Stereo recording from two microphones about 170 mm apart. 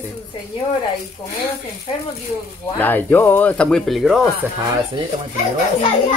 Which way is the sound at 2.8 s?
10° left (ahead or behind).